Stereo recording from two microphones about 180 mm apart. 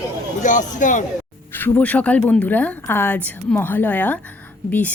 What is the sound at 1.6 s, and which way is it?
A woman's voice, 10° left (ahead or behind).